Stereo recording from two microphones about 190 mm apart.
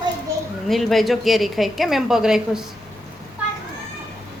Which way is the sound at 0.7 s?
Centre (ahead or behind).